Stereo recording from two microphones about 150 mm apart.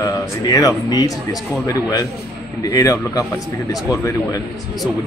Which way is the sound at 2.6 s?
25° left (ahead or behind).